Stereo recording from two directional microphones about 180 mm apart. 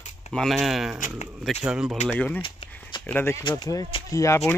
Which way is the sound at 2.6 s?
35° left (ahead or behind).